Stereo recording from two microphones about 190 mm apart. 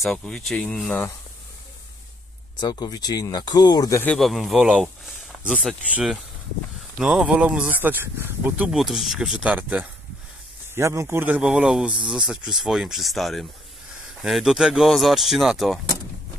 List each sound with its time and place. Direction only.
0.0 s speech: 5° left (ahead or behind)
2.6 s speech: 20° left (ahead or behind)
4.0 s speech: 5° left (ahead or behind)